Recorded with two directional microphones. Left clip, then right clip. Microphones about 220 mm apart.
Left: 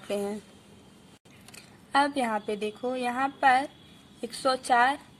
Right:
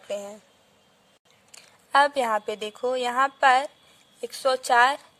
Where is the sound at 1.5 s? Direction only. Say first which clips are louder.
Right 5 dB; 45° right (ahead or behind).